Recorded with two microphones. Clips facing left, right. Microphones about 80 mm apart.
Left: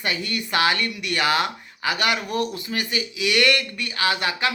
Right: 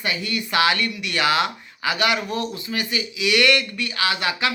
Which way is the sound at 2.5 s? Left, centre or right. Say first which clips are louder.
Even; left.